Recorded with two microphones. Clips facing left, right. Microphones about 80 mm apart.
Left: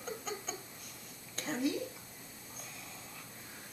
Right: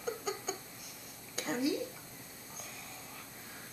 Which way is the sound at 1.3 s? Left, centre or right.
Centre.